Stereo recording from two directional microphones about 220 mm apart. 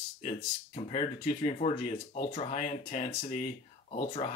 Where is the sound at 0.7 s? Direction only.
30° left (ahead or behind).